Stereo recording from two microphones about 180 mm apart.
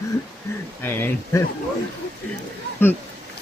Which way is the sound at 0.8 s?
10° left (ahead or behind).